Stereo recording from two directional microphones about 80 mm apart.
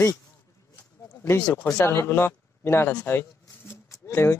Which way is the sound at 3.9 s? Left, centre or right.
Left.